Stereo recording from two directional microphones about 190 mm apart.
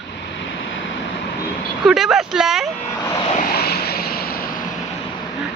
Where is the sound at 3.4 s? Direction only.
55° left (ahead or behind).